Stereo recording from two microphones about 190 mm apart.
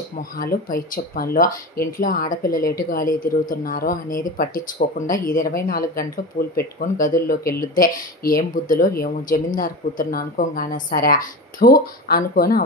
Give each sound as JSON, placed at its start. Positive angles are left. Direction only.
{"t": 0.4, "sound": "speech", "side_deg": 50}